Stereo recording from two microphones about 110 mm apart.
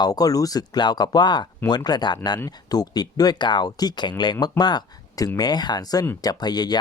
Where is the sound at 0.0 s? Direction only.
35° left (ahead or behind).